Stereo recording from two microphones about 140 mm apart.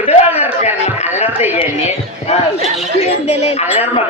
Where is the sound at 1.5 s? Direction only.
50° left (ahead or behind).